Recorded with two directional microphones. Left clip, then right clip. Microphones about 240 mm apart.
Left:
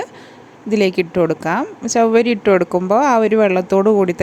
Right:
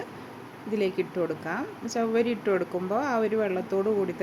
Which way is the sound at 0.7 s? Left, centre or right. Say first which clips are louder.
Left 12 dB; left.